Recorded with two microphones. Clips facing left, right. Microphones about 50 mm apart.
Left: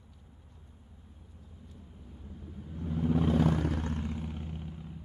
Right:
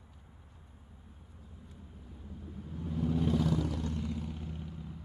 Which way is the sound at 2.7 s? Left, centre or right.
Left.